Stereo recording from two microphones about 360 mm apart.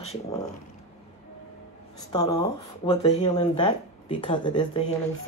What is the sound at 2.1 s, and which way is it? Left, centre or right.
Speech, centre.